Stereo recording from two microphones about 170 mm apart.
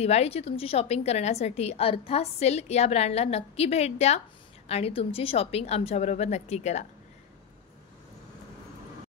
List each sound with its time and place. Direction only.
0.0 s a woman's voice: 40° left (ahead or behind)